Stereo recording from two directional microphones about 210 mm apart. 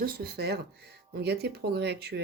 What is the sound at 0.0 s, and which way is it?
Speech, 45° right (ahead or behind).